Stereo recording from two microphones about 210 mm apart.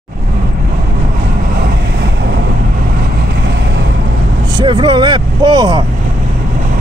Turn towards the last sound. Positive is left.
turn(degrees=-20)  # may be behind; listen again after turning